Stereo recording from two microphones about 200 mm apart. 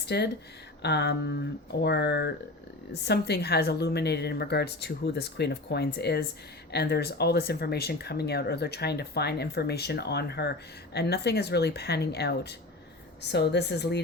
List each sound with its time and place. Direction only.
0.0 s a woman's voice: 55° left (ahead or behind)